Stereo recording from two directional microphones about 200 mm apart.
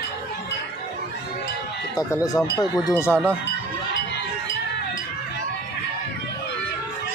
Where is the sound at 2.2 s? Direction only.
15° left (ahead or behind).